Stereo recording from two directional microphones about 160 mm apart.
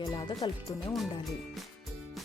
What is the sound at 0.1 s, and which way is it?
Speech, 25° left (ahead or behind).